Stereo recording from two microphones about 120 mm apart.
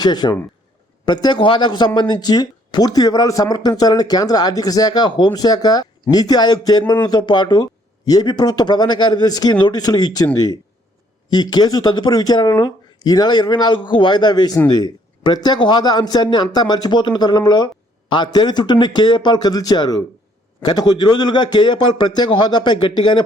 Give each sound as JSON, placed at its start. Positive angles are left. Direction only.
{"t": 0.0, "sound": "speech", "side_deg": 35}